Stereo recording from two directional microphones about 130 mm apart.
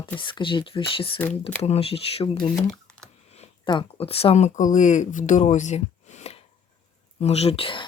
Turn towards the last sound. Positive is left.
turn(degrees=45)  # may be behind; listen again after turning